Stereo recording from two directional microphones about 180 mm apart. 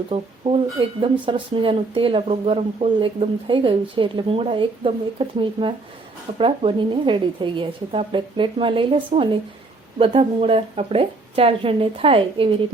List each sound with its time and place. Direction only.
0.1 s a woman's voice: 30° right (ahead or behind)